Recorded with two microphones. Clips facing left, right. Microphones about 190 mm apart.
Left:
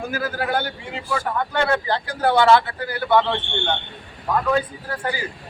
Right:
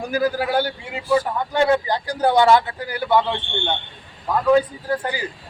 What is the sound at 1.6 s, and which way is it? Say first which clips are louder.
A man's voice: right 3 dB; 15° right (ahead or behind).